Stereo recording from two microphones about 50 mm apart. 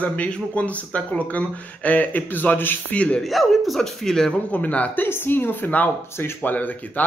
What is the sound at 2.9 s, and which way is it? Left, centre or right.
Speech, left.